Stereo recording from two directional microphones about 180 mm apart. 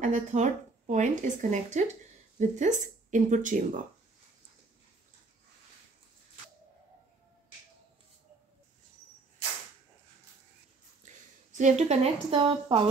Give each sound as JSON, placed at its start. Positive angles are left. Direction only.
{"t": 0.0, "sound": "speech", "side_deg": -45}
{"t": 11.0, "sound": "a sound", "side_deg": -40}
{"t": 11.5, "sound": "a woman's voice", "side_deg": -40}